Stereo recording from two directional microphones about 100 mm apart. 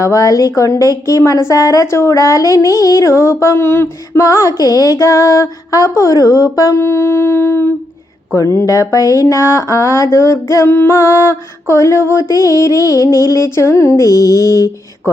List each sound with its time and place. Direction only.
0.0 s speech: 35° left (ahead or behind)
10.5 s music: 25° left (ahead or behind)